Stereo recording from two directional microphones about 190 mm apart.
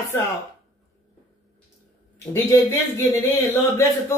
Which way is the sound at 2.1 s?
15° left (ahead or behind).